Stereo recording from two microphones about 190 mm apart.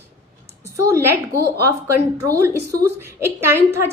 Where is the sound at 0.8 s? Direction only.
15° right (ahead or behind).